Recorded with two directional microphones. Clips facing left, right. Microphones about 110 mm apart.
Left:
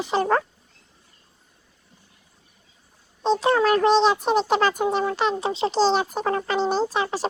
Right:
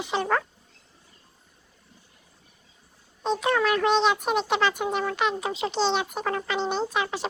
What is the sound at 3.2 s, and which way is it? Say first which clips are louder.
A child's voice: left 4 dB; 30° left (ahead or behind).